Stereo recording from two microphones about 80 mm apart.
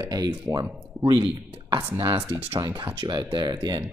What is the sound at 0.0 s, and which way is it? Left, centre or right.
Speech, right.